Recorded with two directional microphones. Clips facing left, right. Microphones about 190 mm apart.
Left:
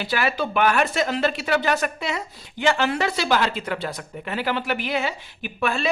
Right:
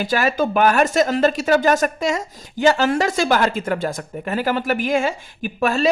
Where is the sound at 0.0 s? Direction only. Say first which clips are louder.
Right 5 dB; 45° right (ahead or behind).